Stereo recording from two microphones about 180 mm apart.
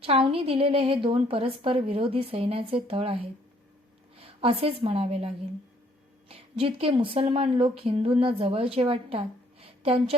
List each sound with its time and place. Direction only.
0.0 s a woman's voice: 30° right (ahead or behind)
4.2 s a woman's voice: 30° right (ahead or behind)